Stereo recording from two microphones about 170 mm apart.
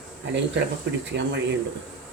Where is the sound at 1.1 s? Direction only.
90° right.